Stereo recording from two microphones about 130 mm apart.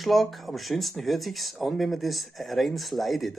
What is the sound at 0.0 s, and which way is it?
Speech, centre (ahead or behind).